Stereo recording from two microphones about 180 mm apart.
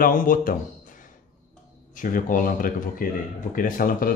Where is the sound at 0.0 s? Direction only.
50° left (ahead or behind).